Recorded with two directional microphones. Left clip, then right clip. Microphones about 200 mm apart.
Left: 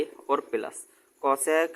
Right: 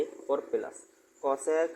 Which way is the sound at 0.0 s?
25° left (ahead or behind).